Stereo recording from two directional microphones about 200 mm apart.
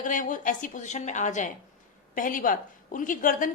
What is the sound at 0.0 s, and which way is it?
A woman's voice, 40° left (ahead or behind).